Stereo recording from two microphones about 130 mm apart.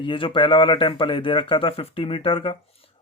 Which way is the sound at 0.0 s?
40° left (ahead or behind).